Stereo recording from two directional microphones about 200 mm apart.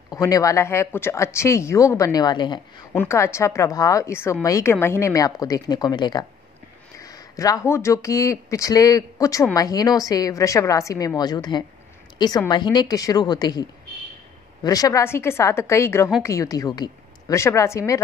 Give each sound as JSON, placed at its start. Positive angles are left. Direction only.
{"t": 0.1, "sound": "speech", "side_deg": 15}
{"t": 2.9, "sound": "a woman's voice", "side_deg": 10}